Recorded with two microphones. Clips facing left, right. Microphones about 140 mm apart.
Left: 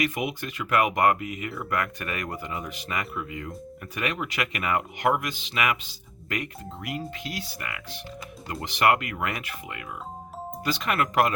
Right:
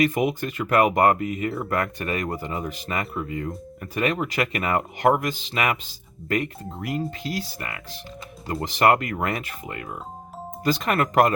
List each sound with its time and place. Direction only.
0.0 s speech: 35° right (ahead or behind)